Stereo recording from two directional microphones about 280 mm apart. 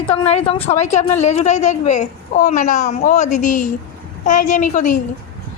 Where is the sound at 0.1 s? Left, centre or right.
Left.